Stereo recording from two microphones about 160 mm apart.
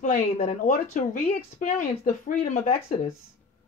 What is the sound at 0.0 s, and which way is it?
A woman's voice, 55° left (ahead or behind).